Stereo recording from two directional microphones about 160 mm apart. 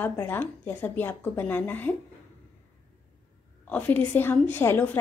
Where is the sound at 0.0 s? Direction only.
10° left (ahead or behind).